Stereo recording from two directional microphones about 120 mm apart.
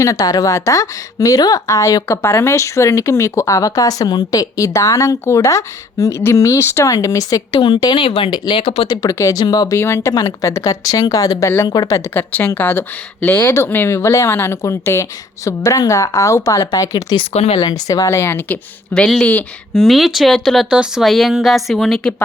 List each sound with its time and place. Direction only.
0.0 s a woman's voice: 30° left (ahead or behind); by 8.9 s 50° left (ahead or behind)
8.9 s speech: 30° left (ahead or behind)
9.7 s a woman's voice: 20° left (ahead or behind)
17.3 s speech: 60° left (ahead or behind)
17.6 s a woman's voice: 35° left (ahead or behind); by 19.0 s 15° left (ahead or behind)
19.7 s speech: centre (ahead or behind)